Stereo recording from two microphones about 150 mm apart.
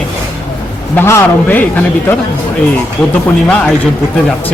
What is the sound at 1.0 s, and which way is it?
Speech, 15° left (ahead or behind).